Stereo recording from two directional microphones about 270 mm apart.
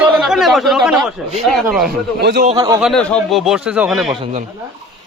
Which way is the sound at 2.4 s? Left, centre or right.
Centre.